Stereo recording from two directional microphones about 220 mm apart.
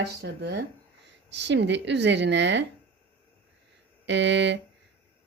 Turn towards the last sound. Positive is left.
turn(degrees=-55)  # may be behind; listen again after turning